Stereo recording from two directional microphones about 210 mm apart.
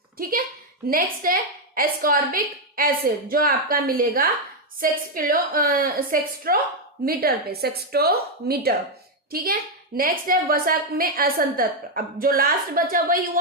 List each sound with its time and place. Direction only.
0.2 s a woman's voice: 45° right (ahead or behind)